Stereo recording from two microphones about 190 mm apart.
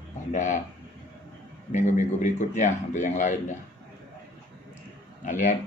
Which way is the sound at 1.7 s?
40° left (ahead or behind).